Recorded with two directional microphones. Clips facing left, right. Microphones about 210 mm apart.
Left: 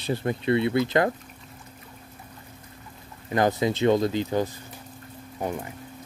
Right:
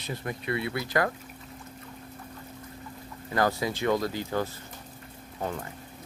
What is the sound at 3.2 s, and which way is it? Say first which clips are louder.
Speech: left 4 dB; 20° left (ahead or behind).